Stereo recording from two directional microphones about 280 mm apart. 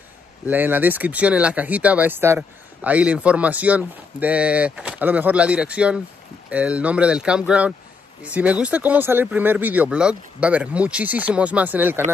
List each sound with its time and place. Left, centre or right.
0.5 s speech: centre